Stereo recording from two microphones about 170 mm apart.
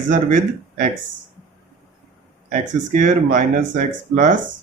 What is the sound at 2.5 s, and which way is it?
Speech, 45° right (ahead or behind).